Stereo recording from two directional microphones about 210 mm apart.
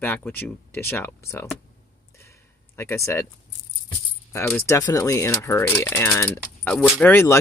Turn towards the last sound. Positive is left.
turn(degrees=10)  # may be behind; listen again after turning